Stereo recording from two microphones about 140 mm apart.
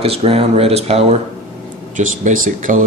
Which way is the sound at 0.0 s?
45° right (ahead or behind).